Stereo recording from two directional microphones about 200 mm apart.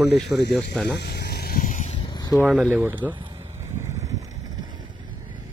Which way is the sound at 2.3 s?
5° right (ahead or behind).